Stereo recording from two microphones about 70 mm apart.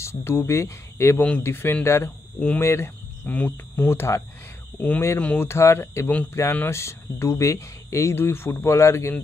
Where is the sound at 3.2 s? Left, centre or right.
Left.